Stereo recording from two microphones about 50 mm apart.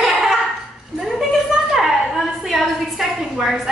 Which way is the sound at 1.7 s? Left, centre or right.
Centre.